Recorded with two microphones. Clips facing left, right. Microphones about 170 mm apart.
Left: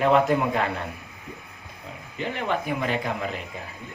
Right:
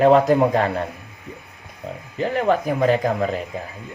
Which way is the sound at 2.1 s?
40° right (ahead or behind).